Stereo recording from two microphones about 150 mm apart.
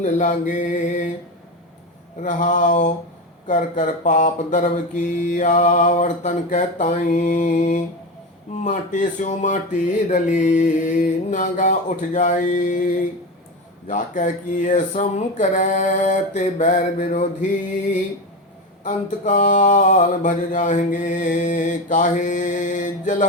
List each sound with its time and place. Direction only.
0.0 s mantra: 60° left (ahead or behind)
2.2 s mantra: 60° left (ahead or behind)
18.9 s mantra: 50° left (ahead or behind)